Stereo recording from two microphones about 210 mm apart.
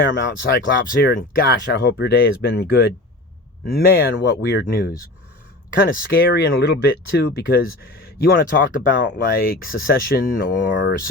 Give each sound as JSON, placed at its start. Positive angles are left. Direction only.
{"t": 0.0, "sound": "speech", "side_deg": 60}
{"t": 0.9, "sound": "speech", "side_deg": 45}
{"t": 10.7, "sound": "speech", "side_deg": 55}